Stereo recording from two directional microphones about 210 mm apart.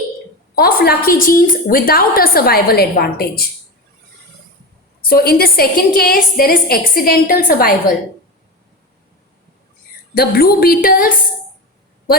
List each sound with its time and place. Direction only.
0.5 s a woman's voice: 45° left (ahead or behind)
5.0 s a woman's voice: 45° left (ahead or behind)
10.2 s a woman's voice: 45° left (ahead or behind)